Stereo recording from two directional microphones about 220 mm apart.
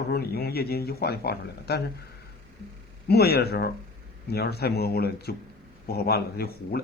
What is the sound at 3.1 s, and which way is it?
A man's voice, 45° left (ahead or behind).